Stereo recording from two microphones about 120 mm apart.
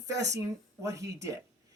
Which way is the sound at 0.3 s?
25° right (ahead or behind).